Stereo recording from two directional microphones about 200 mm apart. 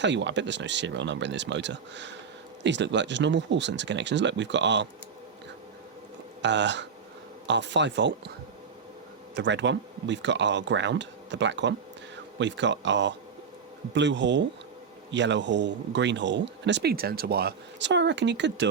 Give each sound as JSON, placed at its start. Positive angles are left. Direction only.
{"t": 0.0, "sound": "a man's voice", "side_deg": -60}
{"t": 6.4, "sound": "a man's voice", "side_deg": -60}
{"t": 9.3, "sound": "a man's voice", "side_deg": -65}